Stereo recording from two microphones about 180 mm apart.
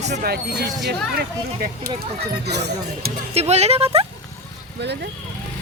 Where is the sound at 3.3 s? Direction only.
35° right (ahead or behind).